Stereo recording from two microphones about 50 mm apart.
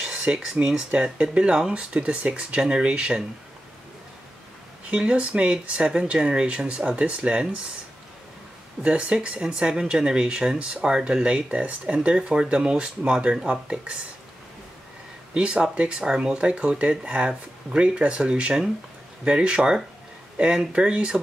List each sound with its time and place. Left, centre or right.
0.0 s a sound: centre
0.7 s speech: right
4.8 s speech: right
8.8 s speech: right
15.3 s speech: centre